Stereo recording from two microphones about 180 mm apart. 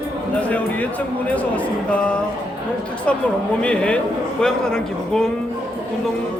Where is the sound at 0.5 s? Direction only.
10° left (ahead or behind).